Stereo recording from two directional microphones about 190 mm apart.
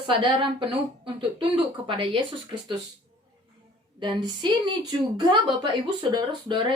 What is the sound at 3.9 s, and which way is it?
Speech, 25° right (ahead or behind).